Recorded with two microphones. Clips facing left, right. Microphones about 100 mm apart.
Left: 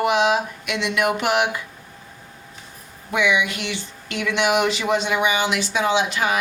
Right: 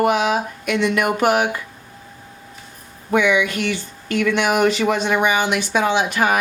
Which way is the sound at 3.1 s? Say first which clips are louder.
Right 4 dB; 45° right (ahead or behind).